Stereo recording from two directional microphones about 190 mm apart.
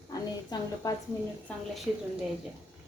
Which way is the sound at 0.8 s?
20° left (ahead or behind).